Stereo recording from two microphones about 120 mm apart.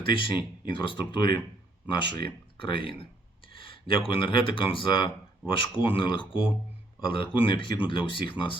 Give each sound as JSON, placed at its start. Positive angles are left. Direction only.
{"t": 0.0, "sound": "speech", "side_deg": 45}